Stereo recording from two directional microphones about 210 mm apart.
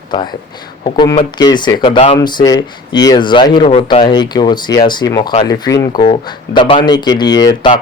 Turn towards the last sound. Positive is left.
turn(degrees=20)  # may be behind; listen again after turning